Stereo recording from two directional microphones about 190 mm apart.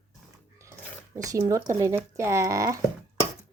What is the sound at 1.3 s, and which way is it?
Speech, 15° right (ahead or behind).